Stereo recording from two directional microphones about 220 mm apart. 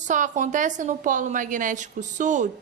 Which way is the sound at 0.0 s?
35° right (ahead or behind).